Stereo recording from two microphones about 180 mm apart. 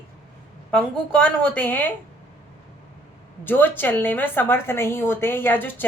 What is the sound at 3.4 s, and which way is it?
A woman's voice, 10° left (ahead or behind).